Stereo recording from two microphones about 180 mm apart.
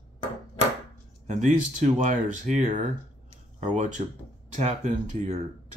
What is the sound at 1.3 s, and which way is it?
Speech, 40° right (ahead or behind).